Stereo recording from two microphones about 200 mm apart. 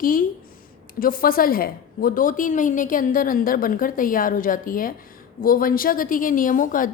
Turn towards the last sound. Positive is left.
turn(degrees=40)  # may be behind; listen again after turning